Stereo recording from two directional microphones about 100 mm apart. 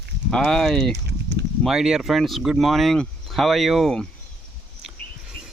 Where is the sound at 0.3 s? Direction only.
5° left (ahead or behind).